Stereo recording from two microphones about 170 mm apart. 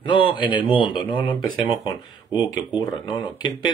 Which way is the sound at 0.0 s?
30° left (ahead or behind).